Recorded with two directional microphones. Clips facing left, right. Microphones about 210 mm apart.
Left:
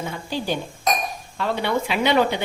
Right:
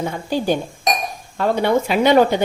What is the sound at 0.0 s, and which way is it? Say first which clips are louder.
A woman's voice: right 6 dB; 45° right (ahead or behind).